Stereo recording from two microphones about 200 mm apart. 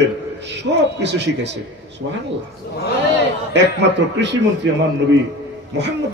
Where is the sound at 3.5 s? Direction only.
60° right (ahead or behind).